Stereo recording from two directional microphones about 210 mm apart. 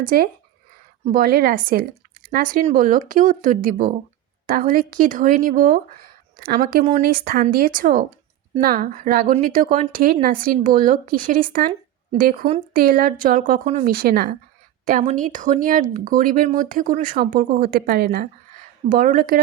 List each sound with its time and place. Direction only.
1.0 s a woman's voice: 40° right (ahead or behind)